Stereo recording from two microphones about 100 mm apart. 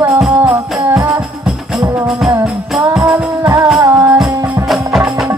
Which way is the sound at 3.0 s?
30° right (ahead or behind).